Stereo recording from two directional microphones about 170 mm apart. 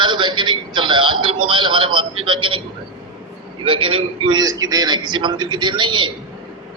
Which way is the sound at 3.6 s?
30° right (ahead or behind).